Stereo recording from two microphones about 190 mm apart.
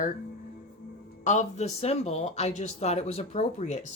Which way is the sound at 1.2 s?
40° left (ahead or behind).